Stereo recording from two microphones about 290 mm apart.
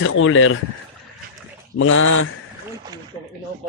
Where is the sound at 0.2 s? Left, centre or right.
Left.